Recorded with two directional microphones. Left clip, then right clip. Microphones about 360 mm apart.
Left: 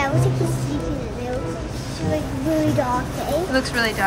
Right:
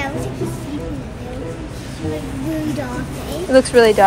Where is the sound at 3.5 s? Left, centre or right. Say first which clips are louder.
Right 14 dB; centre.